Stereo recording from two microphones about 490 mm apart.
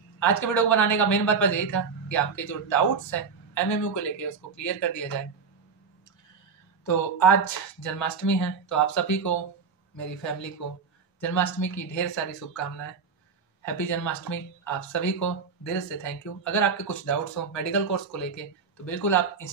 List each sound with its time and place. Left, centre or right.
0.2 s speech: left
6.9 s speech: left